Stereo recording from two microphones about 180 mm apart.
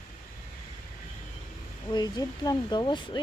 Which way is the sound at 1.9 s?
25° left (ahead or behind).